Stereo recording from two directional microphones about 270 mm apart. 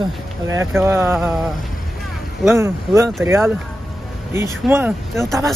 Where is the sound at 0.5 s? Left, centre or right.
Centre.